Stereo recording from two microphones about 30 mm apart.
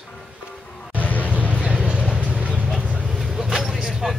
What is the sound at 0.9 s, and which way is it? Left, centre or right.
Music, left.